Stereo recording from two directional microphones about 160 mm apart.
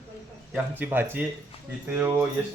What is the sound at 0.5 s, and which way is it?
Speech, 10° right (ahead or behind).